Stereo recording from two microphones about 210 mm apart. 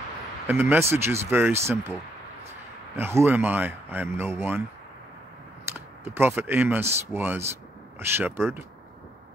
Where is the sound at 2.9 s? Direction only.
10° right (ahead or behind).